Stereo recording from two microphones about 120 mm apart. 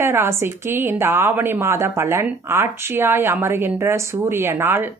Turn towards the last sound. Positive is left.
turn(degrees=-20)  # may be behind; listen again after turning